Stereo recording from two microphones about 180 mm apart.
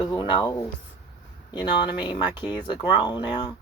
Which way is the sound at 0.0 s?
25° left (ahead or behind).